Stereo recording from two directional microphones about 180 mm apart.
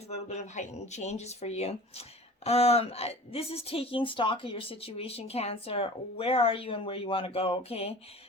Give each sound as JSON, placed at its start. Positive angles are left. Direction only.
{"t": 0.1, "sound": "speech", "side_deg": 40}